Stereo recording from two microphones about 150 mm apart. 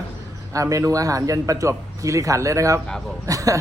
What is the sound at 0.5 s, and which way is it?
Speech, 20° right (ahead or behind).